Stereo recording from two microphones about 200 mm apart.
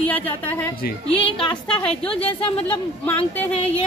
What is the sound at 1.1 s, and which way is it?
A woman's voice, 25° left (ahead or behind).